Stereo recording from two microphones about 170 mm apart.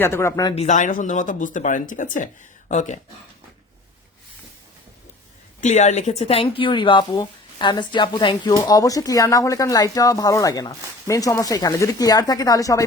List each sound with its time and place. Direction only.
0.0 s speech: 15° left (ahead or behind)
0.5 s speech: 45° left (ahead or behind)
5.5 s speech: 45° left (ahead or behind); by 12.8 s 20° left (ahead or behind)